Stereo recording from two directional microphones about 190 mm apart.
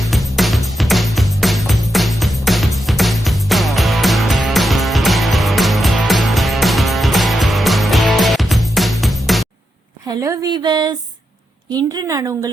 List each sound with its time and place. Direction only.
0.0 s music: centre (ahead or behind)
10.1 s a sound: 20° right (ahead or behind)
11.7 s a woman's voice: 20° right (ahead or behind)